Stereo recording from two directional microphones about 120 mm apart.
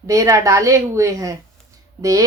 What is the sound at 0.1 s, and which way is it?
Speech, 25° right (ahead or behind).